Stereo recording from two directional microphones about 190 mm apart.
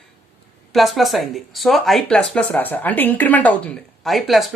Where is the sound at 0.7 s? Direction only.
Centre (ahead or behind).